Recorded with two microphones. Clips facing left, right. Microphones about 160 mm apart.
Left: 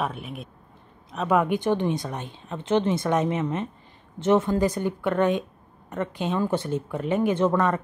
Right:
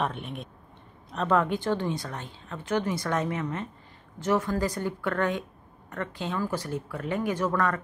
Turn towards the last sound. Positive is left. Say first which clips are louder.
# left 5 dB
turn(degrees=25)  # may be behind; listen again after turning